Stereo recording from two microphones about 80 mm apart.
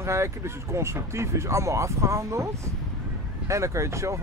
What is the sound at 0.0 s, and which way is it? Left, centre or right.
Speech, right.